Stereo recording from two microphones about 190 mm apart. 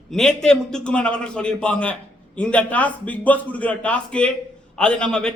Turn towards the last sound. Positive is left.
turn(degrees=5)  # may be behind; listen again after turning